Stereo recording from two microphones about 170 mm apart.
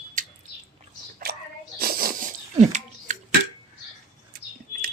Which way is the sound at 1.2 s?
60° right (ahead or behind).